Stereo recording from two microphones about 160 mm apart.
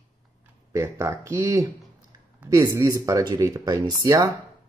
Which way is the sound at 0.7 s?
15° right (ahead or behind).